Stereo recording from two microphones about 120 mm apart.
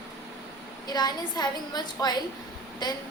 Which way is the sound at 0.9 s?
35° left (ahead or behind).